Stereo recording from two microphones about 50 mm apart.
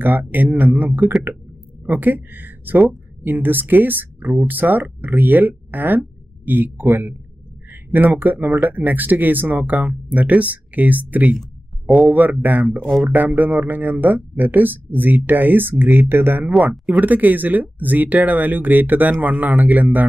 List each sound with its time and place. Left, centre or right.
0.0 s speech: right